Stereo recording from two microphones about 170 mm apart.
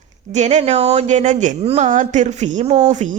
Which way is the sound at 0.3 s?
45° right (ahead or behind).